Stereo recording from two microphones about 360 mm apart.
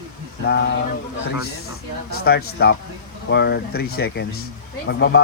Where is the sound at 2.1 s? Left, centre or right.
Left.